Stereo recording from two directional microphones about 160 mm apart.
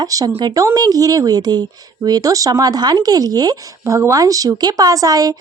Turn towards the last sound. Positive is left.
turn(degrees=-25)  # may be behind; listen again after turning